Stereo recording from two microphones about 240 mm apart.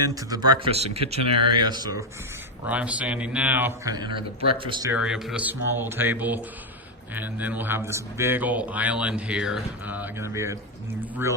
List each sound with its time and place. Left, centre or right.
0.0 s speech: centre
4.9 s speech: centre